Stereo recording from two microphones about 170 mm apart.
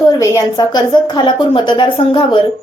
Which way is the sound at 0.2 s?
20° left (ahead or behind).